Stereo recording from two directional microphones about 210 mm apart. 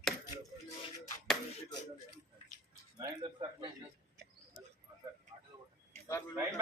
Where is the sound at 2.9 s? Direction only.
15° right (ahead or behind).